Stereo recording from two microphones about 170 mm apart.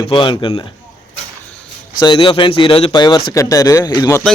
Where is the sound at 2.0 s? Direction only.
30° left (ahead or behind).